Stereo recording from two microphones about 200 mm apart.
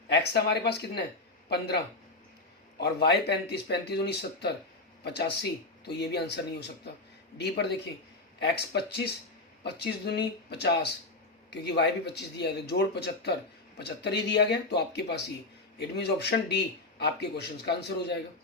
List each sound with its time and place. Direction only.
0.1 s speech: 55° left (ahead or behind)